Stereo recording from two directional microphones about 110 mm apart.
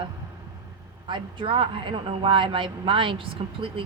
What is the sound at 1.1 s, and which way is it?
Speech, 50° right (ahead or behind).